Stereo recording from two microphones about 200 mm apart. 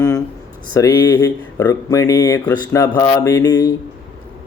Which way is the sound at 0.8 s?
20° left (ahead or behind).